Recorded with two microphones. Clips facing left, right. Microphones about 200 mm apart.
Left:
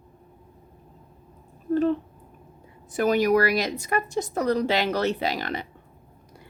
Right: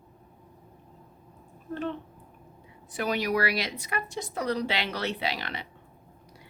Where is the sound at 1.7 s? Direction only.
40° left (ahead or behind).